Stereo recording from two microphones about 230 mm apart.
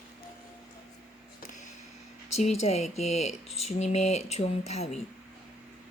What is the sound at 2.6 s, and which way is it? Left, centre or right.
Speech, left.